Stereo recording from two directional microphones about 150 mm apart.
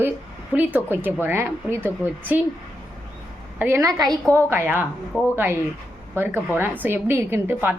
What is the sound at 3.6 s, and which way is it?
Speech, 20° right (ahead or behind).